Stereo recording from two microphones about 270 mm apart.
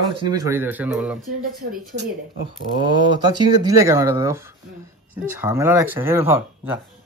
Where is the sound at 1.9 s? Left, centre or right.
Right.